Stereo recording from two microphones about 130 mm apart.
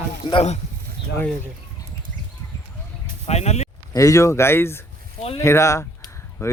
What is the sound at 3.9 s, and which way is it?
Speech, 25° left (ahead or behind).